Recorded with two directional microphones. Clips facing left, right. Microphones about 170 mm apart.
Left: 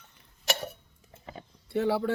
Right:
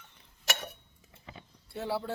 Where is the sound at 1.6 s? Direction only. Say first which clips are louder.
Left 7 dB; 65° left (ahead or behind).